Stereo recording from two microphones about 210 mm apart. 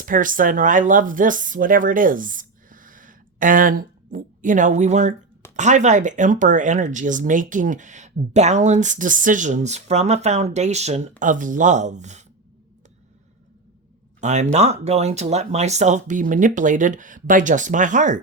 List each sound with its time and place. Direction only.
0.0 s speech: 40° right (ahead or behind)
14.2 s speech: 35° right (ahead or behind)